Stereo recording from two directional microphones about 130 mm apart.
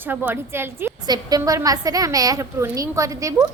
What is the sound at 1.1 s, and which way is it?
A woman's voice, 30° right (ahead or behind).